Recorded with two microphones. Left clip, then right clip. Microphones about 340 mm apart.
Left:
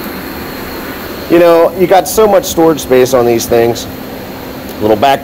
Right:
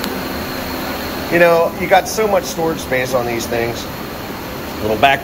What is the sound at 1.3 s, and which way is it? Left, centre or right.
Speech, left.